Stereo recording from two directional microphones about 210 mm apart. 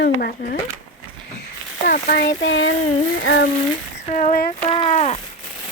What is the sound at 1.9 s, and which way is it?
Speech, 50° left (ahead or behind).